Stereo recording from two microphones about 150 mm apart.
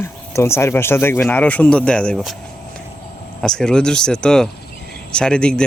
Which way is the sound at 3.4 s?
5° left (ahead or behind).